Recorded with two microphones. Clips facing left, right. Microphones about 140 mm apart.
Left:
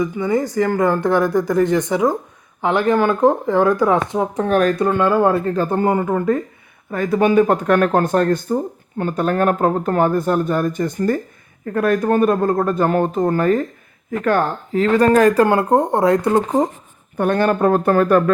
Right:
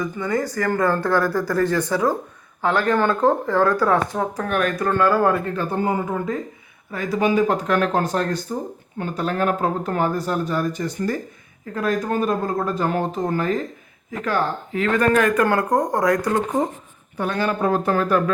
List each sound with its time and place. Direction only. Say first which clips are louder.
0.0 s speech: left 5 dB; 20° left (ahead or behind)
4.4 s speech: left 7 dB; 35° left (ahead or behind)
4.9 s speech: left 3 dB; 20° left (ahead or behind)
5.7 s speech: left 4 dB; 55° left (ahead or behind)
14.7 s speech: left 5 dB; 35° left (ahead or behind)
17.2 s speech: left 6 dB; 55° left (ahead or behind)